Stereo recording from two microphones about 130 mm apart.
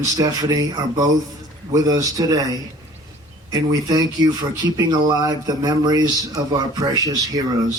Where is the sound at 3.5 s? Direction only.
30° right (ahead or behind).